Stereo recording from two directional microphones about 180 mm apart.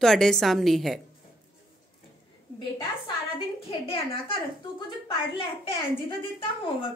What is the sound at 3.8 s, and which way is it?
A woman's voice, 30° left (ahead or behind).